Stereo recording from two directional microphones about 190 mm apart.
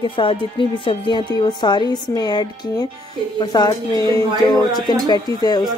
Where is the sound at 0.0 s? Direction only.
25° left (ahead or behind).